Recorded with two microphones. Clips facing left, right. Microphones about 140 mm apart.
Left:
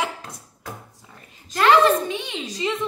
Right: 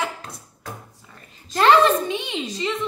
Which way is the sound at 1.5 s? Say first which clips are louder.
Right 1 dB; 25° right (ahead or behind).